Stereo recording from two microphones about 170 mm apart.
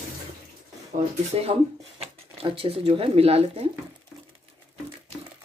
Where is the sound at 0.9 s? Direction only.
35° right (ahead or behind).